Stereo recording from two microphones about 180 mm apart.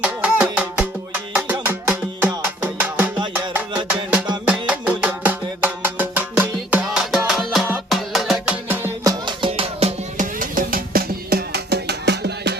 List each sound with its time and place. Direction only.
0.0 s music: 5° right (ahead or behind)
4.4 s music: 5° right (ahead or behind)
9.2 s music: 30° right (ahead or behind)
10.4 s music: 50° right (ahead or behind); by 12.5 s 70° right (ahead or behind)